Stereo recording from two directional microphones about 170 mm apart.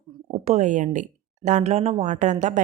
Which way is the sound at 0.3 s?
35° right (ahead or behind).